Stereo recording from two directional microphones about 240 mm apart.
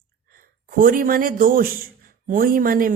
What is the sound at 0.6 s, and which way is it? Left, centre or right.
Speech, right.